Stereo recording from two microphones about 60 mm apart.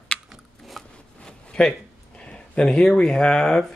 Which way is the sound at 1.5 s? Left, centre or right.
Centre.